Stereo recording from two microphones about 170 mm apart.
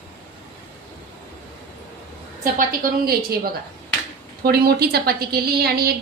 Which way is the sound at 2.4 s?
55° right (ahead or behind).